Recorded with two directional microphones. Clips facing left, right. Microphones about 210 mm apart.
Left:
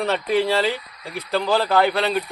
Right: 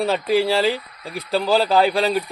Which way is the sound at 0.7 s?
35° right (ahead or behind).